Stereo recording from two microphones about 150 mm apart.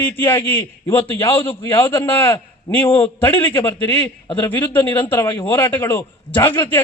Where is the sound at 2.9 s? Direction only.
35° left (ahead or behind).